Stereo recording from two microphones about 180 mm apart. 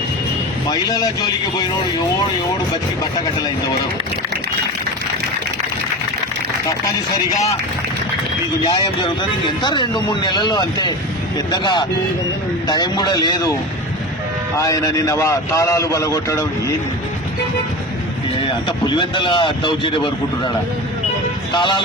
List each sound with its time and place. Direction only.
0.7 s speech: 20° left (ahead or behind)
7.3 s speech: 40° left (ahead or behind)
9.6 s speech: 25° left (ahead or behind)
14.6 s a man's voice: 20° left (ahead or behind)
18.4 s speech: 25° left (ahead or behind)
21.5 s speech: 25° left (ahead or behind)